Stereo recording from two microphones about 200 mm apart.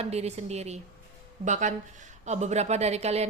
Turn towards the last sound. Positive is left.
turn(degrees=-30)  # may be behind; listen again after turning